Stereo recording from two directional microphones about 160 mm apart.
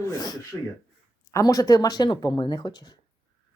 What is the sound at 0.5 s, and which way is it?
Speech, centre (ahead or behind).